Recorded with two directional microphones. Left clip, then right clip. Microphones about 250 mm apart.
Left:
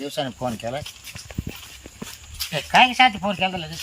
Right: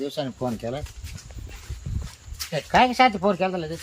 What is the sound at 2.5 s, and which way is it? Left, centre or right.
Speech, centre.